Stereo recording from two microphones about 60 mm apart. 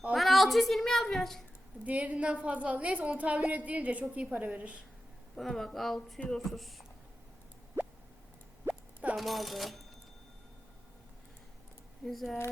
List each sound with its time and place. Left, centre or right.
0.1 s a child's voice: centre
1.8 s a woman's voice: right
5.4 s speech: centre
7.8 s plop: right
8.6 s a sound: right
9.1 s speech: centre
12.0 s speech: centre